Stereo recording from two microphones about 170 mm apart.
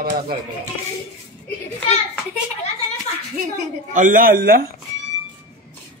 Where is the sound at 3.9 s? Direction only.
50° right (ahead or behind).